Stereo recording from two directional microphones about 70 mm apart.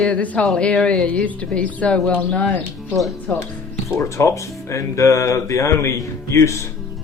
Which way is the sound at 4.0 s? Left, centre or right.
Left.